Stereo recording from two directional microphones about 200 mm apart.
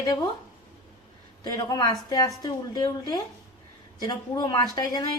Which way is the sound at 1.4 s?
20° left (ahead or behind).